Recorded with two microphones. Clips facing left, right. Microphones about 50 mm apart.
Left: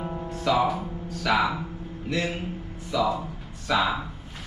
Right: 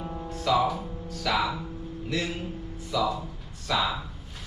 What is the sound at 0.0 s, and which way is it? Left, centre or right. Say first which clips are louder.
Music: left 3 dB; centre.